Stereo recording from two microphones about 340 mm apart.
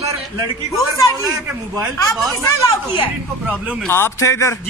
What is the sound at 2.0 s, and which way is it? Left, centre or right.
A man's voice, centre.